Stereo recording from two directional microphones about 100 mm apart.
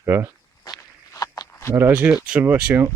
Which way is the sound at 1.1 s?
35° left (ahead or behind).